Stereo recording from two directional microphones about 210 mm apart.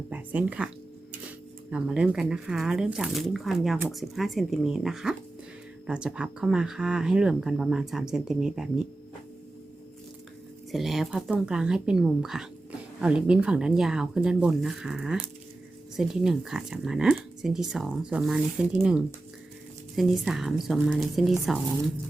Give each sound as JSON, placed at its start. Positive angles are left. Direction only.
{"t": 0.1, "sound": "speech", "side_deg": -5}
{"t": 1.7, "sound": "speech", "side_deg": -5}
{"t": 10.7, "sound": "speech", "side_deg": 0}